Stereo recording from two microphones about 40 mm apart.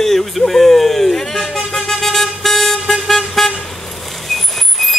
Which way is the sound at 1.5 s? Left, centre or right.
Centre.